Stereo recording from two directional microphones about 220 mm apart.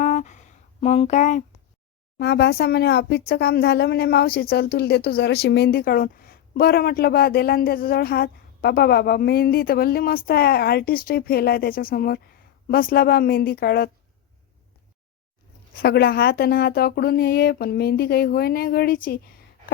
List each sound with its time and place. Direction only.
0.0 s a sound: 30° left (ahead or behind)
2.1 s speech: 50° left (ahead or behind)
15.7 s speech: 45° left (ahead or behind)